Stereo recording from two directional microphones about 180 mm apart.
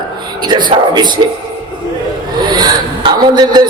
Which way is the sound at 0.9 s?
25° right (ahead or behind).